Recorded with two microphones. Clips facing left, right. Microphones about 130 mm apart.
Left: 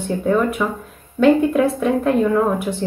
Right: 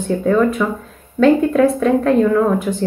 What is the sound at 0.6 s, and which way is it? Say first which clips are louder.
A woman's voice: right 2 dB; 15° left (ahead or behind).